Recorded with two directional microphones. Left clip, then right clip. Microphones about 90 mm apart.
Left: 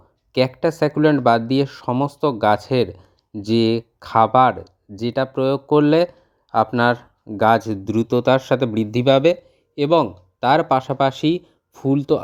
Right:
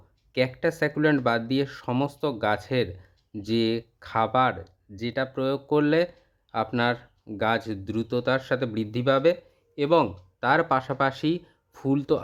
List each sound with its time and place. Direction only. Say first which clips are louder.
0.3 s speech: left 6 dB; 40° left (ahead or behind)
11.7 s speech: left 6 dB; 20° left (ahead or behind)